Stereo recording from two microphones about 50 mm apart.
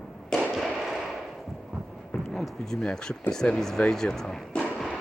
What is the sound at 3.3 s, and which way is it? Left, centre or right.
Speech, centre.